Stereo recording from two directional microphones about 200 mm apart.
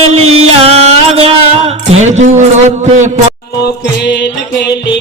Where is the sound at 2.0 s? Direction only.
35° right (ahead or behind).